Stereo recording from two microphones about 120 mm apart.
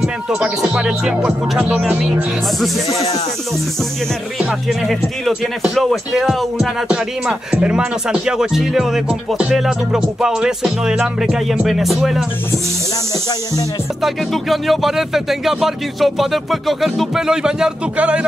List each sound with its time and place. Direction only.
0.0 s speech: 5° right (ahead or behind)
2.9 s speech: 60° left (ahead or behind)
4.4 s speech: 5° right (ahead or behind)
14.0 s speech: centre (ahead or behind)